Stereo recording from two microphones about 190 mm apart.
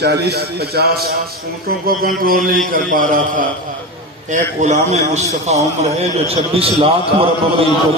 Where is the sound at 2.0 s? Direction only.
50° right (ahead or behind).